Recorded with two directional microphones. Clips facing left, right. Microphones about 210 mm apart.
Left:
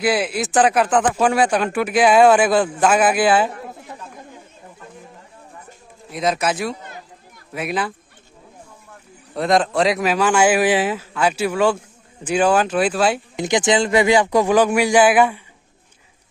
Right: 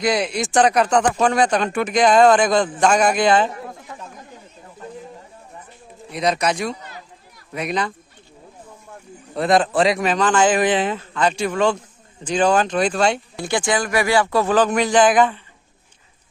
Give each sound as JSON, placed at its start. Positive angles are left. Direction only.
{"t": 0.0, "sound": "a man's voice", "side_deg": 5}
{"t": 6.0, "sound": "speech", "side_deg": 0}
{"t": 9.3, "sound": "a man's voice", "side_deg": 0}
{"t": 13.4, "sound": "a man's voice", "side_deg": 20}